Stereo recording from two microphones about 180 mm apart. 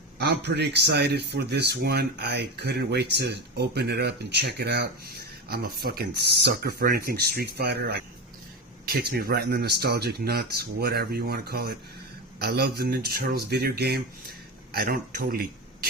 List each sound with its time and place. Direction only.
0.2 s speech: 65° right (ahead or behind)
9.1 s speech: 60° right (ahead or behind)